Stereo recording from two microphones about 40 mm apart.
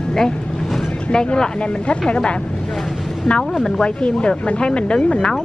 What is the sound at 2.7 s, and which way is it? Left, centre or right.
Vehicle, centre.